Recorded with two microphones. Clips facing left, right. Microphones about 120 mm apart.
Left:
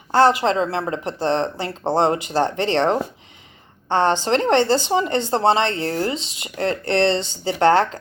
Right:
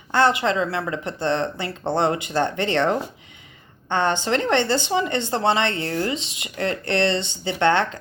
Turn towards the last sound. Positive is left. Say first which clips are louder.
# left 4 dB
turn(degrees=35)  # may be behind; listen again after turning